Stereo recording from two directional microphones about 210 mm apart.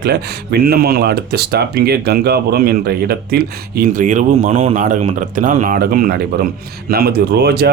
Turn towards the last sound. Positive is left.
turn(degrees=-50)  # may be behind; listen again after turning